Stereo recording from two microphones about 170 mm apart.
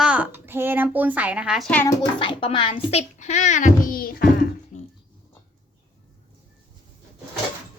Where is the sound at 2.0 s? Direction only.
30° left (ahead or behind); by 4.2 s 60° left (ahead or behind).